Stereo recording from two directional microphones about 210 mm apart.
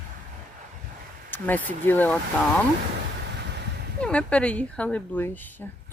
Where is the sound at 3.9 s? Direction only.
5° left (ahead or behind).